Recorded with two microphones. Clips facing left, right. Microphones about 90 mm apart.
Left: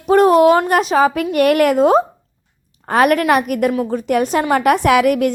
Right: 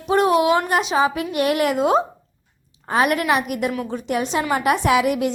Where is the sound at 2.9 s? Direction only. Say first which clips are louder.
Left 5 dB; 55° left (ahead or behind).